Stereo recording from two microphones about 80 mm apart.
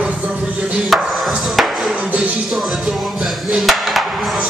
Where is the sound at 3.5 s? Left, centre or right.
Centre.